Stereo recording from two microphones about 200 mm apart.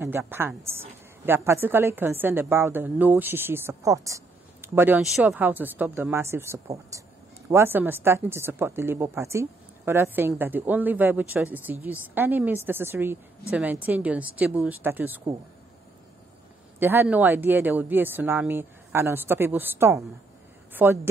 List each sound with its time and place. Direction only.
0.0 s a woman's voice: 10° right (ahead or behind)
16.8 s a woman's voice: 10° right (ahead or behind)